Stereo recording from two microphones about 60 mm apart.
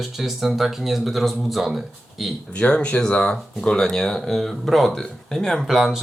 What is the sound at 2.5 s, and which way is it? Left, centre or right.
Speech, centre.